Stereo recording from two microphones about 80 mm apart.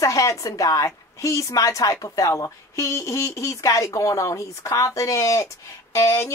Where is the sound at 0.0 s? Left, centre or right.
Left.